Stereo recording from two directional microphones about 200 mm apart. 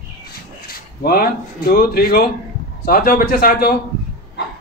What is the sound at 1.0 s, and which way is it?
Speech, 50° left (ahead or behind).